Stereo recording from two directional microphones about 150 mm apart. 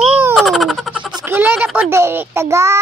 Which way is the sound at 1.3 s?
15° right (ahead or behind).